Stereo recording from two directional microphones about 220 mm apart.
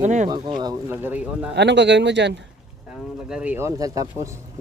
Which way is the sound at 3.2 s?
5° right (ahead or behind).